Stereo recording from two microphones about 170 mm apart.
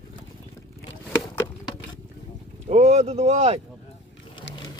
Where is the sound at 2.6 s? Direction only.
40° right (ahead or behind).